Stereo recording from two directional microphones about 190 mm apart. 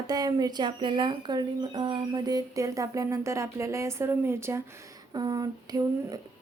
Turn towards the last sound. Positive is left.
turn(degrees=-20)  # may be behind; listen again after turning